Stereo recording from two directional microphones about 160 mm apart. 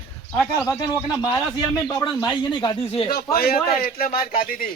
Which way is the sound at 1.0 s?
25° left (ahead or behind).